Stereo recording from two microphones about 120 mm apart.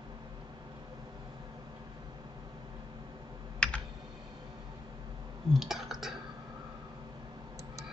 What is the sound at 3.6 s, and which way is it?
Computer keyboard, 10° left (ahead or behind).